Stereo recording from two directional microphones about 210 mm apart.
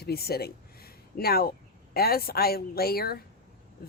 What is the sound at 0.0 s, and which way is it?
Speech, 50° left (ahead or behind).